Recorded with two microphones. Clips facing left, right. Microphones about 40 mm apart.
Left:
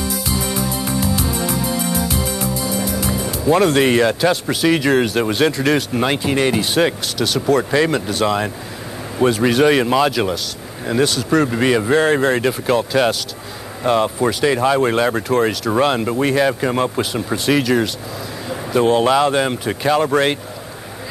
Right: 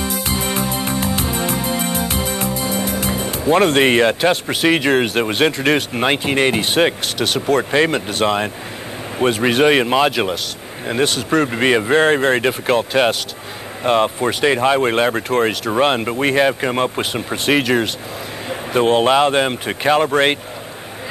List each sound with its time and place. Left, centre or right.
0.0 s music: right
5.3 s speech: right